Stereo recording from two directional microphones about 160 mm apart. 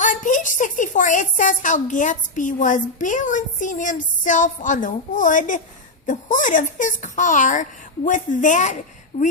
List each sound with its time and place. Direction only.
0.0 s a woman's voice: 50° left (ahead or behind)
9.1 s speech: 40° left (ahead or behind)